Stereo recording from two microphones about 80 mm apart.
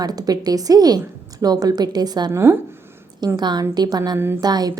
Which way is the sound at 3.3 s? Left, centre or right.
Right.